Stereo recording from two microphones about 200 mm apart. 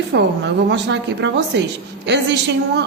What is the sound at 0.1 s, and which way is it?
Speech, 60° right (ahead or behind).